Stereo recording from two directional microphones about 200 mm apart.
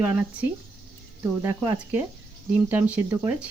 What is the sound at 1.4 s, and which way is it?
Speech, 15° right (ahead or behind).